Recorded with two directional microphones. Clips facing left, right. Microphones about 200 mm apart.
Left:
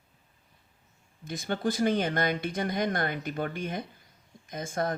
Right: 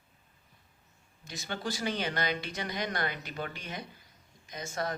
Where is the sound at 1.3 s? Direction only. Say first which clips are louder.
Left 7 dB; 50° left (ahead or behind).